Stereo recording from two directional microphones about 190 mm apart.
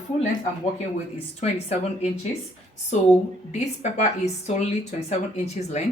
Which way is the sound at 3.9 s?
40° left (ahead or behind).